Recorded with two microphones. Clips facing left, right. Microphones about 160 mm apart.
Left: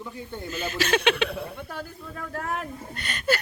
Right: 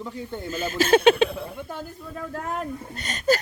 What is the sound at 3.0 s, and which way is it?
Speech, 40° right (ahead or behind).